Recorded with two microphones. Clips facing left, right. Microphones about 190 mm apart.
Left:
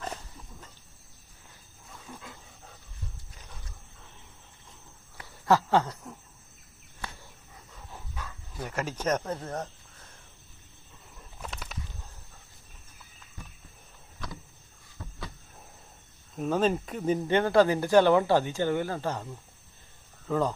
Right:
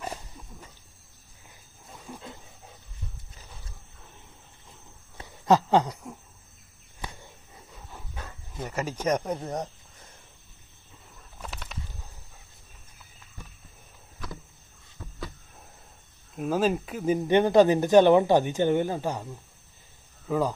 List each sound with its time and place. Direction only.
0.0 s dog: 10° right (ahead or behind)
2.2 s wild animals: 20° right (ahead or behind)
5.1 s a sound: 20° right (ahead or behind)
8.1 s wild animals: 30° right (ahead or behind)
8.6 s speech: 10° right (ahead or behind)
11.3 s bird: centre (ahead or behind)
16.3 s speech: 5° right (ahead or behind)